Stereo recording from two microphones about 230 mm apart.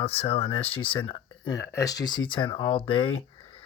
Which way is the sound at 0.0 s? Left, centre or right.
Left.